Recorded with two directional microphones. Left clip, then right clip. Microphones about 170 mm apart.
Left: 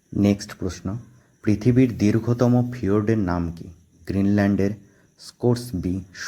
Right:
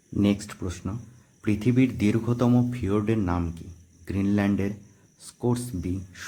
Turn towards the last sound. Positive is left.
turn(degrees=25)  # may be behind; listen again after turning